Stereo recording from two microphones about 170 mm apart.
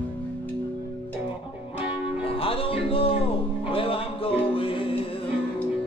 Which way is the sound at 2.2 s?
35° left (ahead or behind).